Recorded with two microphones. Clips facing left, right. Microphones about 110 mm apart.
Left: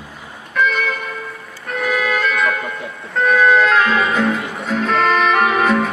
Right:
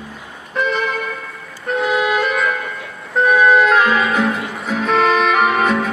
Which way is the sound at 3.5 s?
10° right (ahead or behind).